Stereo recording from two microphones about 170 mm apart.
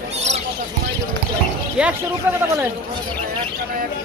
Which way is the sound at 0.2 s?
40° right (ahead or behind).